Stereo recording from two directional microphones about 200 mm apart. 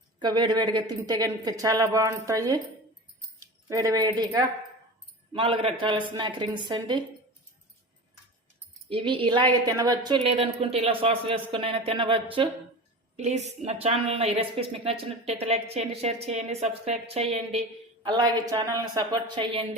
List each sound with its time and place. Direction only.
0.2 s a woman's voice: 20° right (ahead or behind)
3.4 s speech: 15° right (ahead or behind)
5.3 s a woman's voice: 25° right (ahead or behind)
8.9 s a woman's voice: 25° right (ahead or behind)